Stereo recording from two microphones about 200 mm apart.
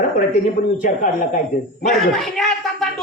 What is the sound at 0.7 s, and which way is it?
Speech, 40° left (ahead or behind).